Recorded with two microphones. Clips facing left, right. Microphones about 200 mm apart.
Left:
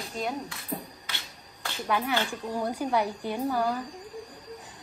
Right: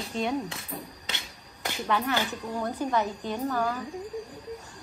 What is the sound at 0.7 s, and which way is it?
Beatboxing, 30° left (ahead or behind).